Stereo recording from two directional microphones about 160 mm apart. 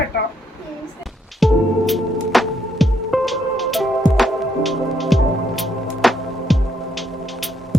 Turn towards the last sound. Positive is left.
turn(degrees=0)  # may be behind; listen again after turning